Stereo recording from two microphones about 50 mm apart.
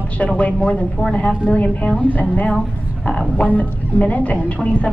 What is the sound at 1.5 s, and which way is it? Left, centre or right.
A woman's voice, left.